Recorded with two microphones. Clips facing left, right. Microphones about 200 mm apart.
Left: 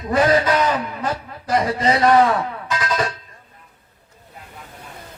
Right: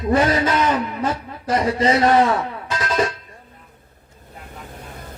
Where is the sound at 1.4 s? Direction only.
25° right (ahead or behind).